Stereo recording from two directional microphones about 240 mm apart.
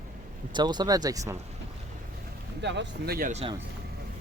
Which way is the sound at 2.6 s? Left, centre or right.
Right.